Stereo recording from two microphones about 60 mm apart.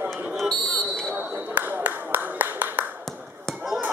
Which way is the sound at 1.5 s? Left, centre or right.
Right.